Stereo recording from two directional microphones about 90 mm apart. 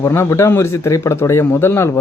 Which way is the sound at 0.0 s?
30° left (ahead or behind).